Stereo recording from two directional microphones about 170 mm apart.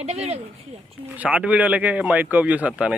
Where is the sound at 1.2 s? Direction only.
5° right (ahead or behind).